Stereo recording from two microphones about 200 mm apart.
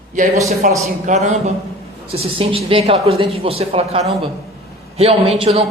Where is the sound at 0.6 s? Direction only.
40° right (ahead or behind).